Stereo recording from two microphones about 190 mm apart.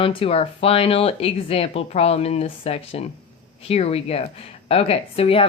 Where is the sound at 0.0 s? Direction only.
30° left (ahead or behind).